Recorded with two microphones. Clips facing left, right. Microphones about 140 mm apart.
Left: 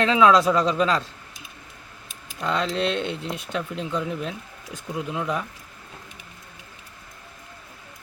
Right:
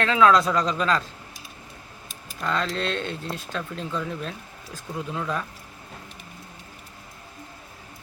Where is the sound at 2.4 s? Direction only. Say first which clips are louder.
Left 2 dB; 20° left (ahead or behind).